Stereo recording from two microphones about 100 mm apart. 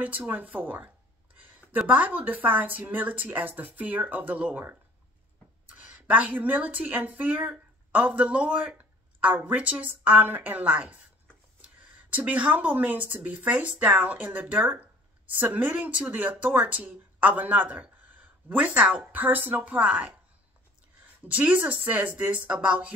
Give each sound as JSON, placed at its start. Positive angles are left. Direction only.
{"t": 0.0, "sound": "speech", "side_deg": -15}
{"t": 21.3, "sound": "speech", "side_deg": -15}